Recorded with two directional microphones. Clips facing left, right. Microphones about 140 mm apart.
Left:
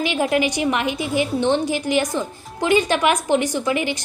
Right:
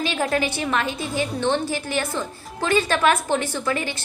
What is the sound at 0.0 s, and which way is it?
A woman's voice, 15° left (ahead or behind).